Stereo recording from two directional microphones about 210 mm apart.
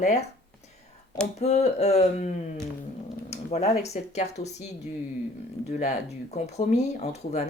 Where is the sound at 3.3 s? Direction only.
30° left (ahead or behind).